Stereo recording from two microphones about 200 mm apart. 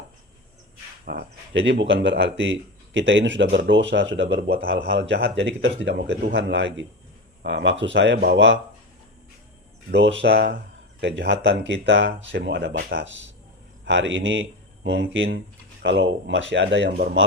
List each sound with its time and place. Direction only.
1.0 s speech: 60° right (ahead or behind)
9.9 s speech: 65° right (ahead or behind)
11.0 s speech: 60° right (ahead or behind)
14.8 s speech: 60° right (ahead or behind)